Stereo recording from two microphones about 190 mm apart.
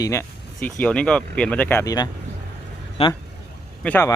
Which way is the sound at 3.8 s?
10° left (ahead or behind).